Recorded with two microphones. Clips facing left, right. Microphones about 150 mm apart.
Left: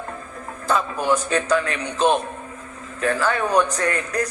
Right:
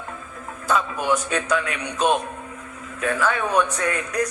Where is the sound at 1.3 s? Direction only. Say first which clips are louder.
Left 3 dB; 30° left (ahead or behind).